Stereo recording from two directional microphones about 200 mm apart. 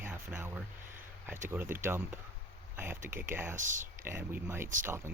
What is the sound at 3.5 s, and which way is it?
Speech, 40° right (ahead or behind).